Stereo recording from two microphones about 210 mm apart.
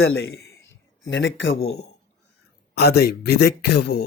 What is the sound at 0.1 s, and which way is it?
A man's voice, 60° left (ahead or behind).